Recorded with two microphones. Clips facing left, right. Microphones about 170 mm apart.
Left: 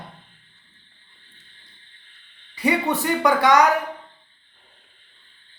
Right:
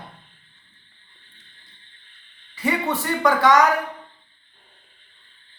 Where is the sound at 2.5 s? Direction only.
15° left (ahead or behind).